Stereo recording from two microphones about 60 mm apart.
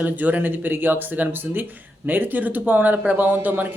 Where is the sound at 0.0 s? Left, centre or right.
Right.